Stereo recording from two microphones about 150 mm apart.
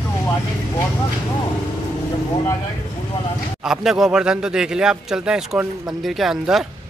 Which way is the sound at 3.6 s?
5° right (ahead or behind).